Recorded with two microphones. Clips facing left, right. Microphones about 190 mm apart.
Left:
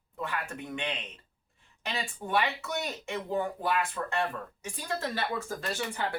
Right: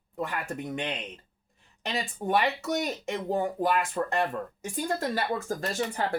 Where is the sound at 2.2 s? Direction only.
40° right (ahead or behind).